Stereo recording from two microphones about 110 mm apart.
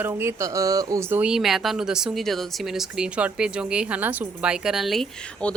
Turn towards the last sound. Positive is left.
turn(degrees=10)  # may be behind; listen again after turning